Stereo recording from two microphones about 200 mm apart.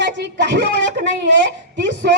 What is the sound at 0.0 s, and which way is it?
Speech, 60° right (ahead or behind).